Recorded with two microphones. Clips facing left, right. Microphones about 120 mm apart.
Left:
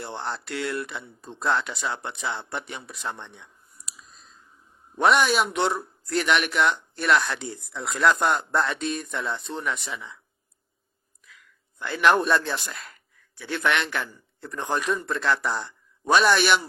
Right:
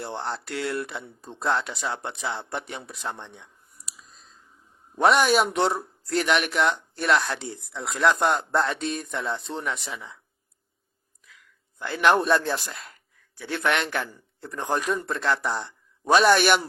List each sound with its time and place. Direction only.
0.2 s speech: 30° right (ahead or behind)
3.1 s a sound: 35° right (ahead or behind)
4.9 s speech: 35° right (ahead or behind)
11.8 s speech: 30° right (ahead or behind)
12.5 s speech: 15° right (ahead or behind)
13.5 s speech: 35° right (ahead or behind)
16.1 s a man's voice: 40° right (ahead or behind)